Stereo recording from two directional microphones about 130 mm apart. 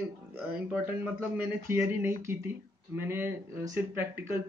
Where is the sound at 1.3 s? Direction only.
15° right (ahead or behind).